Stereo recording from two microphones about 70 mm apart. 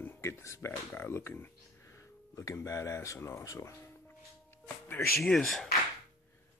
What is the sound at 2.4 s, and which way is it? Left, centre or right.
Speech, left.